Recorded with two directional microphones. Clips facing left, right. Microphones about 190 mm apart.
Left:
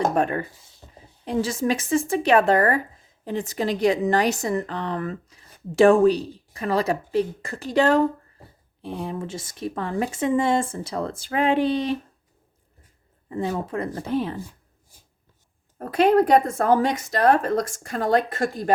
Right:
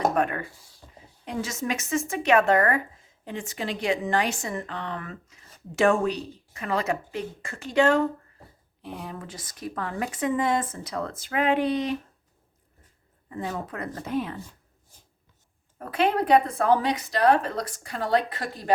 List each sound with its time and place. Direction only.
0.1 s a woman's voice: 30° left (ahead or behind)
13.2 s a woman's voice: 30° left (ahead or behind)
15.8 s speech: 40° left (ahead or behind)